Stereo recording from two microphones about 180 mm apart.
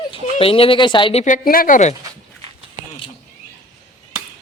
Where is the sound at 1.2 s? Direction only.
50° left (ahead or behind).